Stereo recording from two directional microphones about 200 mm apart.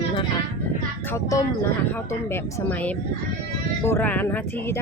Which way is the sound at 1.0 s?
15° left (ahead or behind).